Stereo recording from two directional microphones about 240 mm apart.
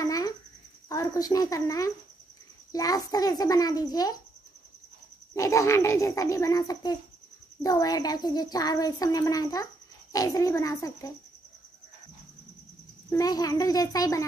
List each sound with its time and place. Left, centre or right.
0.0 s cricket: centre
0.8 s speech: centre
5.3 s speech: centre
13.1 s speech: centre